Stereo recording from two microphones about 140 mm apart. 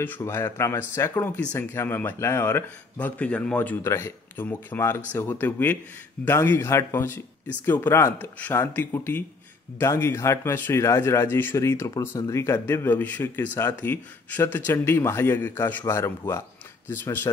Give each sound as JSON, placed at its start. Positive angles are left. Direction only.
{"t": 0.0, "sound": "speech", "side_deg": 15}